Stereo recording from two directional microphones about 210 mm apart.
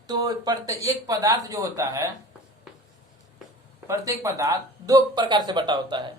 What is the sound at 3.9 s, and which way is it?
Speech, 15° right (ahead or behind).